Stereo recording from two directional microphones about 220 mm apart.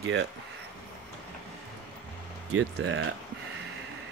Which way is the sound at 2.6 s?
60° right (ahead or behind).